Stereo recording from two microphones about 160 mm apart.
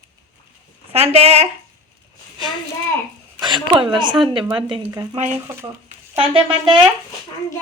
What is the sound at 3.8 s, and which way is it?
Speech, 30° right (ahead or behind).